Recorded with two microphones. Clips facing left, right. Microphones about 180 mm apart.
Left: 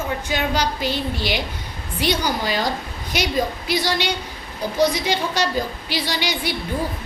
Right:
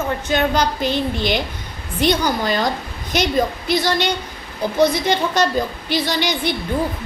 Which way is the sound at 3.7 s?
10° left (ahead or behind).